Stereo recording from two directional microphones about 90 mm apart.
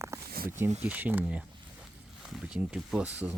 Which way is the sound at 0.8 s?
15° right (ahead or behind).